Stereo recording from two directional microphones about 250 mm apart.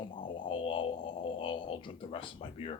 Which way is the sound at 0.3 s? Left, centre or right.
Centre.